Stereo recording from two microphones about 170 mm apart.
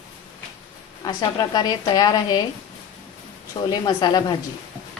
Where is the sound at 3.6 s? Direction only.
25° left (ahead or behind).